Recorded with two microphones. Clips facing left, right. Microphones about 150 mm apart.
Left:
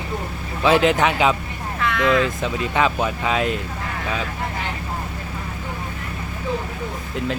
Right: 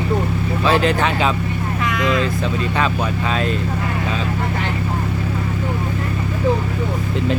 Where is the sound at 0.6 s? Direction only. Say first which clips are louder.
Left 1 dB; 15° left (ahead or behind).